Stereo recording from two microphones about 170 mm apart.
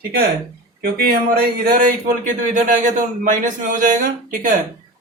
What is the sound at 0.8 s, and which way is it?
Speech, 65° right (ahead or behind).